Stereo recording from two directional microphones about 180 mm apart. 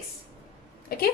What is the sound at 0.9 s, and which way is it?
Speech, 60° left (ahead or behind).